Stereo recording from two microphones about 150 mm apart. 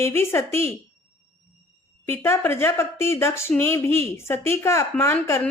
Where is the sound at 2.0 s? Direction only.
15° left (ahead or behind).